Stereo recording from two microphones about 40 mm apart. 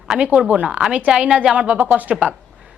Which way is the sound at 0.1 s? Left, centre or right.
Centre.